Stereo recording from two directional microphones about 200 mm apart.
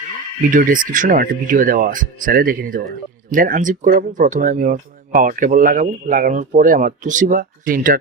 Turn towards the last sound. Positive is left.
turn(degrees=-45)  # may be behind; listen again after turning